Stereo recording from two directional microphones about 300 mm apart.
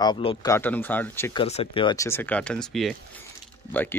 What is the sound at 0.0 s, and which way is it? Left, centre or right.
Speech, centre.